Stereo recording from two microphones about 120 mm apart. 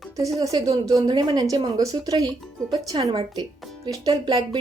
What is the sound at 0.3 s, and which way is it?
A woman's voice, 30° right (ahead or behind).